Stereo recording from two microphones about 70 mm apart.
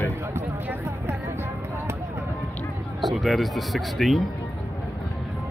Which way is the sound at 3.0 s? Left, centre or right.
Centre.